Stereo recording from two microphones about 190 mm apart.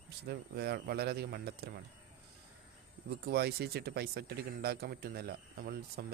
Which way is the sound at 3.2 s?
55° right (ahead or behind).